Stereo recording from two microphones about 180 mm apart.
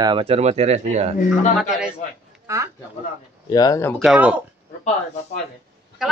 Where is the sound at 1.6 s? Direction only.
5° right (ahead or behind).